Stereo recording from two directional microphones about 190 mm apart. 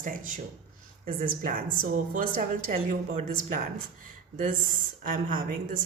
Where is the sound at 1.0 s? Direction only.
50° right (ahead or behind).